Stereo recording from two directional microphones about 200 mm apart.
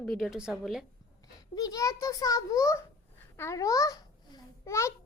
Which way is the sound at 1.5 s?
20° left (ahead or behind).